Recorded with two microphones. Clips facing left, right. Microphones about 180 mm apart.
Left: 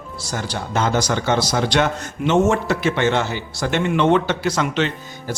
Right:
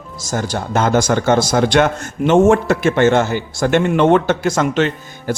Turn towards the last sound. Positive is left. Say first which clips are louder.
# right 4 dB
turn(degrees=-50)  # may be behind; listen again after turning